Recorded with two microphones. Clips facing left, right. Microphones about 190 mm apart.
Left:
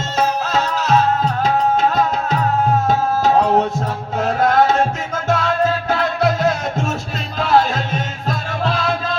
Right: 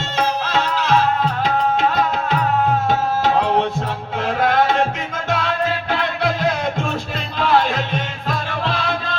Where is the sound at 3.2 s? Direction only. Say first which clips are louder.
Left 4 dB; 40° left (ahead or behind).